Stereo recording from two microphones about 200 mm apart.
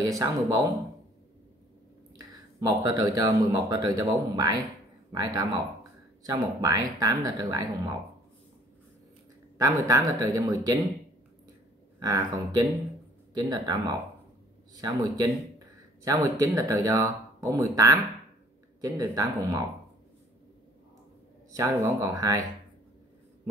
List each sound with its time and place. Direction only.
0.0 s speech: 20° right (ahead or behind)
2.1 s speech: 20° right (ahead or behind)
9.6 s speech: 15° right (ahead or behind)
12.0 s speech: 20° right (ahead or behind)
21.5 s speech: 15° right (ahead or behind)